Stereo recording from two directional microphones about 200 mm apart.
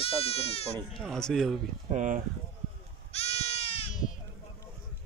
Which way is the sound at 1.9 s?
40° right (ahead or behind).